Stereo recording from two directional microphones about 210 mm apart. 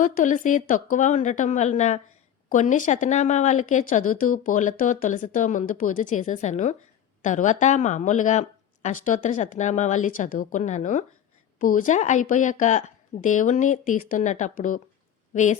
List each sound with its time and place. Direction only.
0.0 s speech: 40° left (ahead or behind)